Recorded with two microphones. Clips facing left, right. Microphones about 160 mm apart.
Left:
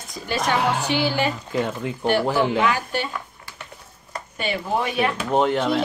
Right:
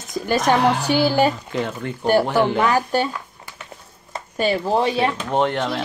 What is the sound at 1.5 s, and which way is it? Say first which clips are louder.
Speech: left 1 dB; 5° left (ahead or behind).